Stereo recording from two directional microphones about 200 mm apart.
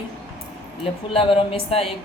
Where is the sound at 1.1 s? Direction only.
25° left (ahead or behind).